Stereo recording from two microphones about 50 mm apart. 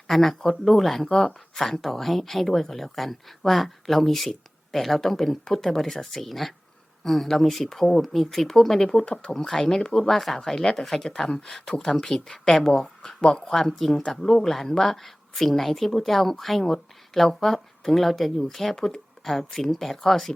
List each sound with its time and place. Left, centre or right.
0.1 s speech: centre